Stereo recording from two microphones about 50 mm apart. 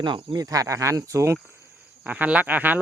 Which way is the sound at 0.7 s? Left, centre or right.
Right.